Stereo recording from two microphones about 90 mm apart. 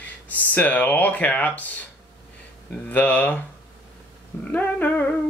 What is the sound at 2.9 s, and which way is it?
Speech, 20° left (ahead or behind).